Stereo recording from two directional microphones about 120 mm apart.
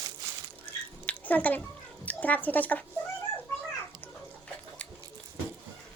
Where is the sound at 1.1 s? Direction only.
15° left (ahead or behind).